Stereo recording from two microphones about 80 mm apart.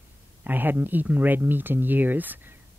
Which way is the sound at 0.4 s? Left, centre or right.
Right.